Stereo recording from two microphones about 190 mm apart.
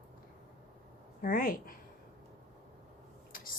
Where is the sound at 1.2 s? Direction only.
50° left (ahead or behind).